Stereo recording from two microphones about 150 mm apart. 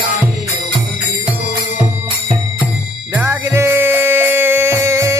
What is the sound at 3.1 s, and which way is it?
Music, 15° right (ahead or behind).